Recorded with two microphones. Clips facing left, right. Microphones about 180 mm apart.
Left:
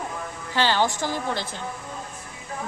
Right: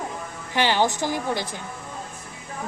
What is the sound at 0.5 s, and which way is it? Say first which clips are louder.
Speech: right 1 dB; 15° right (ahead or behind).